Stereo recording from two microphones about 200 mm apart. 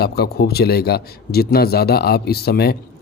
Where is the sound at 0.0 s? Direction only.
55° left (ahead or behind).